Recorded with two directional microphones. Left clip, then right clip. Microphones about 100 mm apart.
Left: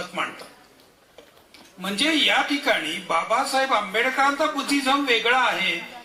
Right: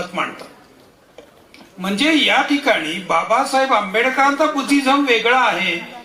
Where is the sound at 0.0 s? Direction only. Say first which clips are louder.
Right 5 dB; 20° right (ahead or behind).